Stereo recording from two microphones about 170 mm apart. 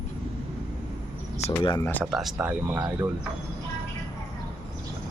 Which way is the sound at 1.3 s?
40° left (ahead or behind).